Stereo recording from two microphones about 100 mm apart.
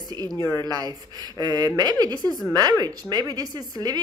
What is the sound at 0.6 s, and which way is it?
Speech, 40° right (ahead or behind).